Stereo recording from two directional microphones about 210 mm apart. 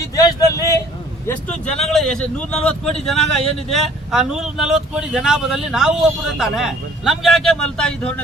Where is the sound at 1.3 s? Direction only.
5° left (ahead or behind).